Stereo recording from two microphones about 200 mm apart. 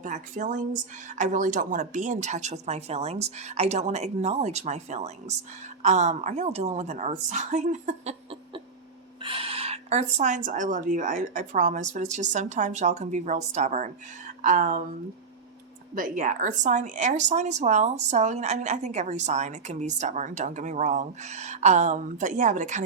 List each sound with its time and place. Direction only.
0.0 s a woman's voice: 40° right (ahead or behind)
16.0 s a woman's voice: 40° right (ahead or behind)